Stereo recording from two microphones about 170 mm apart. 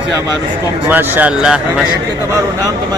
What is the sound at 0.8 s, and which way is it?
Speech, 10° right (ahead or behind).